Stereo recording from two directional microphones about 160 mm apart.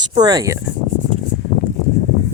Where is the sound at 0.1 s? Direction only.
25° right (ahead or behind).